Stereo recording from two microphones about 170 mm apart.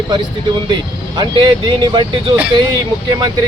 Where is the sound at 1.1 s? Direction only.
25° right (ahead or behind).